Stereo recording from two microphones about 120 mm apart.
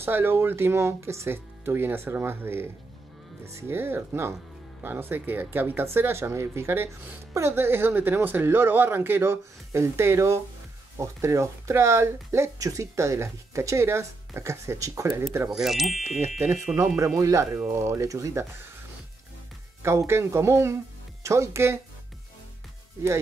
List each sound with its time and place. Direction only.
0.0 s speech: 20° right (ahead or behind)
15.6 s speech: centre (ahead or behind)
16.7 s speech: 25° right (ahead or behind)
19.8 s speech: 20° right (ahead or behind)